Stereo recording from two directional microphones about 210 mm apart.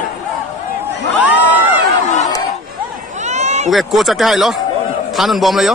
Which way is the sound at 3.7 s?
Centre (ahead or behind).